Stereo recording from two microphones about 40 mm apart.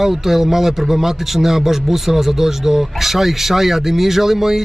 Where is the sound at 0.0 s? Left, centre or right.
Centre.